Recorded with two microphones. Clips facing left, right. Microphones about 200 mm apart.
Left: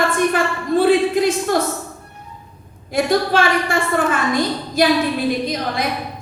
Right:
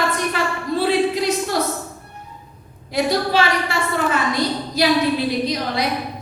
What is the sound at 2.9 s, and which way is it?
A woman's voice, 50° left (ahead or behind).